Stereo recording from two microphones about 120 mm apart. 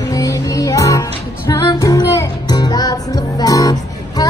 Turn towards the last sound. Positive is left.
turn(degrees=30)  # may be behind; listen again after turning